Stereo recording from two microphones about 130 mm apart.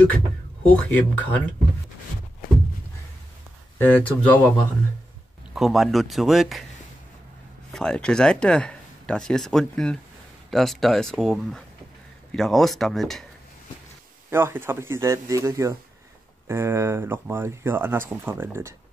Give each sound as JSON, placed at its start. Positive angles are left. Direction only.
{"t": 0.7, "sound": "speech", "side_deg": 10}
{"t": 3.7, "sound": "speech", "side_deg": 15}
{"t": 5.5, "sound": "speech", "side_deg": 0}
{"t": 7.7, "sound": "speech", "side_deg": 5}
{"t": 14.3, "sound": "speech", "side_deg": -20}